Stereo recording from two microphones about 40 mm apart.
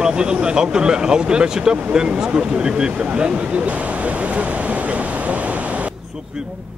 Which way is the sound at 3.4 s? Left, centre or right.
Right.